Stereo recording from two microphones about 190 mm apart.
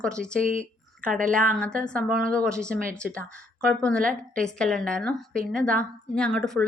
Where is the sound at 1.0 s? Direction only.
45° right (ahead or behind).